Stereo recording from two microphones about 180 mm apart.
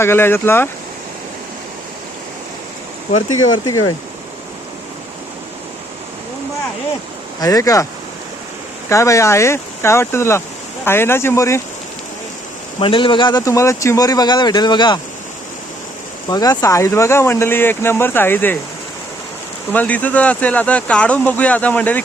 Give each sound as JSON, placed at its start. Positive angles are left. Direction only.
{"t": 0.0, "sound": "speech", "side_deg": 15}
{"t": 3.1, "sound": "speech", "side_deg": 30}
{"t": 7.4, "sound": "speech", "side_deg": 20}
{"t": 8.9, "sound": "speech", "side_deg": 15}
{"t": 12.8, "sound": "speech", "side_deg": 30}
{"t": 16.3, "sound": "speech", "side_deg": 20}
{"t": 19.7, "sound": "speech", "side_deg": 10}